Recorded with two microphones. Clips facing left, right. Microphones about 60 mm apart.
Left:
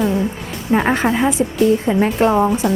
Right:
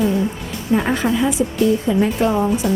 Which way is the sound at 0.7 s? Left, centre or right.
Left.